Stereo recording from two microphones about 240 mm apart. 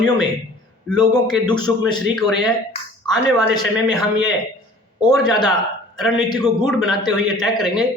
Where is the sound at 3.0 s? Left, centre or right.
Centre.